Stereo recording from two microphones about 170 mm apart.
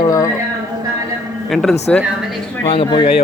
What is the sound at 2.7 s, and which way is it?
Speech, 30° left (ahead or behind).